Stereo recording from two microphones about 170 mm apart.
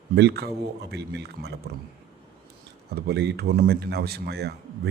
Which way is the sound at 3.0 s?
75° right (ahead or behind).